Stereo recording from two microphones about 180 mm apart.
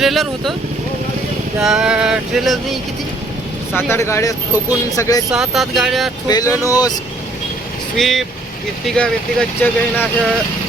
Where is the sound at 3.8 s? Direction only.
15° left (ahead or behind).